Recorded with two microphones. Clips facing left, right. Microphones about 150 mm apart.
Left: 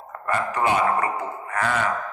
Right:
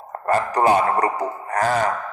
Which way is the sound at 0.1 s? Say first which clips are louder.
Right 5 dB; 35° right (ahead or behind).